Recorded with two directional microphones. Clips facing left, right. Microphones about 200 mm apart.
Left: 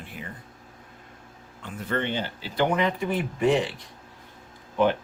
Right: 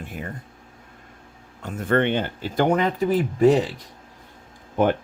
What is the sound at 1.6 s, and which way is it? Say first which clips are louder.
Speech: right 8 dB; 45° right (ahead or behind).